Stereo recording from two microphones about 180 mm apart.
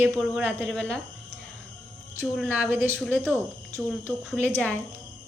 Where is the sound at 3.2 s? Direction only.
15° right (ahead or behind).